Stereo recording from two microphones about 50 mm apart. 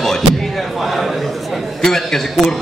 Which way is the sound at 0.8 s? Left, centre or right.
Centre.